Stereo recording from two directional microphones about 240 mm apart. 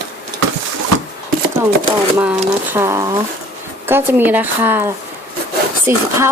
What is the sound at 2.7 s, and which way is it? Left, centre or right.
Speech, centre.